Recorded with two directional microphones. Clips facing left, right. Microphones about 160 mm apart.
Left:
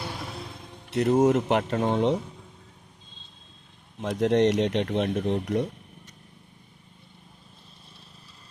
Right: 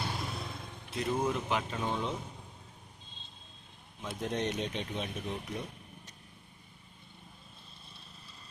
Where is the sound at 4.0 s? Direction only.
85° left.